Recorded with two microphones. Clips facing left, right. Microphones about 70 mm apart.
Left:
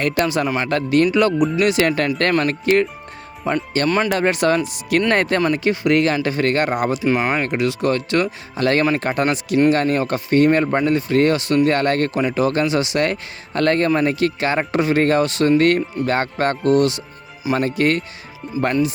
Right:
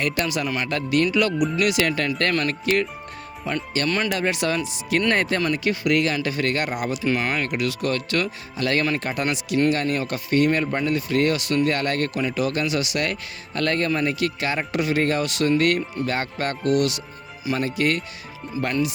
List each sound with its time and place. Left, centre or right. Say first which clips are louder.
0.3 s speech: left 5 dB; left
3.8 s speech: left 6 dB; left
4.1 s speech: left 6 dB; left
5.4 s speech: left 5 dB; left
7.0 s speech: left 5 dB; left
8.5 s speech: left 5 dB; left
10.9 s speech: left 4 dB; left
17.5 s speech: left 5 dB; left